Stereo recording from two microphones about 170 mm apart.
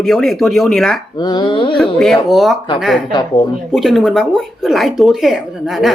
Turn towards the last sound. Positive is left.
turn(degrees=0)  # may be behind; listen again after turning